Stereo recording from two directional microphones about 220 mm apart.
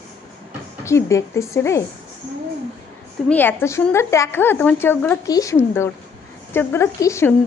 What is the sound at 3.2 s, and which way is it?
Speech, 10° left (ahead or behind).